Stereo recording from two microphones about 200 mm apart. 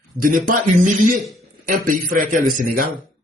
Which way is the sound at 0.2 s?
45° right (ahead or behind).